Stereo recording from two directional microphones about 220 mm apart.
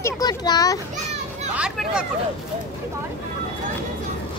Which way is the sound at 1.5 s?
5° right (ahead or behind).